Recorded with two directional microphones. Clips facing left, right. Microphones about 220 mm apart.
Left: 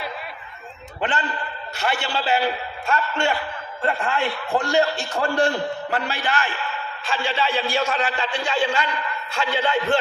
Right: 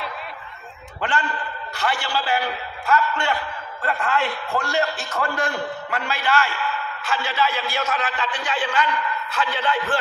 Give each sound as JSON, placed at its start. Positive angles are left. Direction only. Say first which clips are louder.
{"t": 1.8, "sound": "a man's voice", "louder": "even", "side_deg": 25}
{"t": 4.5, "sound": "speech", "louder": "left 7 dB", "side_deg": 15}
{"t": 5.2, "sound": "a man's voice", "louder": "left 5 dB", "side_deg": 30}
{"t": 6.3, "sound": "speech", "louder": "right 3 dB", "side_deg": 15}
{"t": 7.1, "sound": "a man's voice", "louder": "even", "side_deg": 30}